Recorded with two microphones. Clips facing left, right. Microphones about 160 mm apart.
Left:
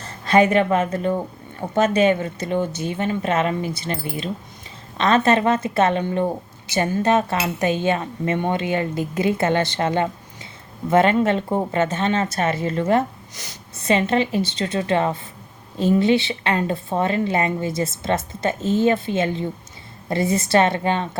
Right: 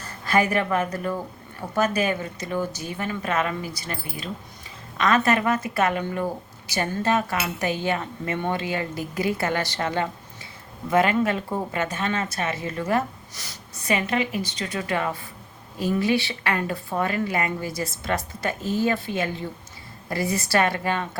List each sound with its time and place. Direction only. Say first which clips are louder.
0.0 s a woman's voice: left 6 dB; 25° left (ahead or behind)